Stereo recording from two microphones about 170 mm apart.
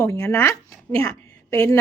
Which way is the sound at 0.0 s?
20° left (ahead or behind).